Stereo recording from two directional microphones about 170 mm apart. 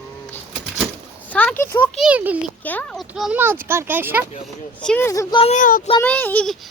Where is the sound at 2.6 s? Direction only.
5° left (ahead or behind).